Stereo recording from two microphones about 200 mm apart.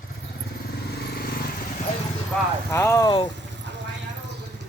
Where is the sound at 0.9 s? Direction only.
50° left (ahead or behind).